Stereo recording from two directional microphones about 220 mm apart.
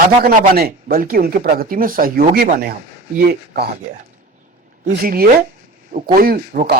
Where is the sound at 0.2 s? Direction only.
45° right (ahead or behind).